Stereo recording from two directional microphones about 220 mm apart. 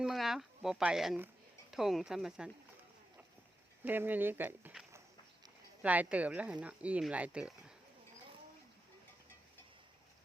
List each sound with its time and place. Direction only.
0.0 s speech: centre (ahead or behind)
3.8 s speech: 10° right (ahead or behind)